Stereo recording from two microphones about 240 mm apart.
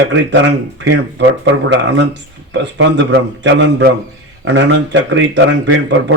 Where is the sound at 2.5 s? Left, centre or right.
Right.